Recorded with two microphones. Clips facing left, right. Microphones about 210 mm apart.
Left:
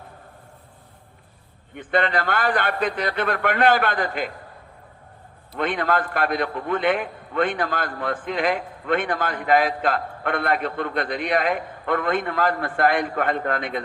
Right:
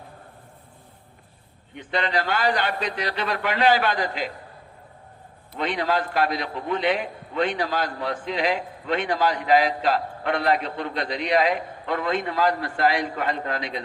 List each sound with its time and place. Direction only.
1.7 s a man's voice: 55° left (ahead or behind)
5.5 s a man's voice: 55° left (ahead or behind)